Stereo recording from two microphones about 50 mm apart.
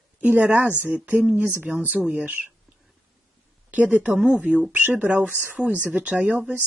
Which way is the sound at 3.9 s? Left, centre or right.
Right.